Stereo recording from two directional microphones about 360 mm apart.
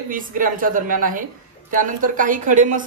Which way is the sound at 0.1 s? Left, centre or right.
Right.